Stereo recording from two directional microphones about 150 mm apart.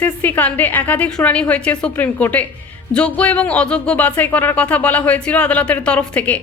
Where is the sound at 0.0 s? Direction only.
10° left (ahead or behind).